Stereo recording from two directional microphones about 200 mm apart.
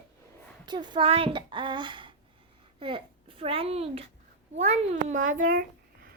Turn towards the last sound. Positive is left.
turn(degrees=-40)  # may be behind; listen again after turning